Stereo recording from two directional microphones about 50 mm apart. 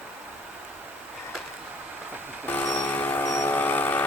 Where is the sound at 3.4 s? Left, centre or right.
Left.